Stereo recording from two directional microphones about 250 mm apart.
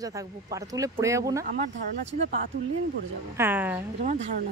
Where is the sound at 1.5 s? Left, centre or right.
Right.